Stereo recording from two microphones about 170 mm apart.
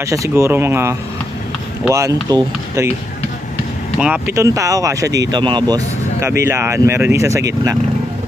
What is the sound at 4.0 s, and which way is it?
Speech, 10° right (ahead or behind).